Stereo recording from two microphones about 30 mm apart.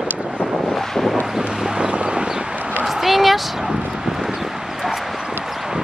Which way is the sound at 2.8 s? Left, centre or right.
Centre.